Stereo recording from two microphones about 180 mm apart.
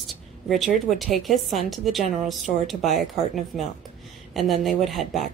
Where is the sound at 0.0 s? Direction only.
Centre (ahead or behind).